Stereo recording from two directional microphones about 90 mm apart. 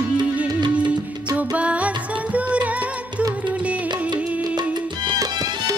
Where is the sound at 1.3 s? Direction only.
15° right (ahead or behind).